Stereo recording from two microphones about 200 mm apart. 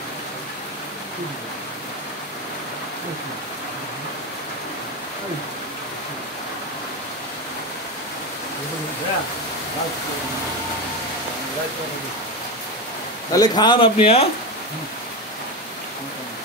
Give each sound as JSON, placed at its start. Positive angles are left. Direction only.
{"t": 13.3, "sound": "speech", "side_deg": 20}